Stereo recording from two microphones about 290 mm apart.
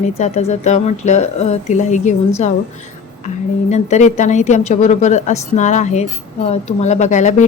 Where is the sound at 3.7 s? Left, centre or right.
Left.